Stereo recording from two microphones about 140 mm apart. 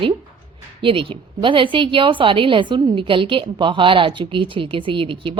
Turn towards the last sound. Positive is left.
turn(degrees=-35)  # may be behind; listen again after turning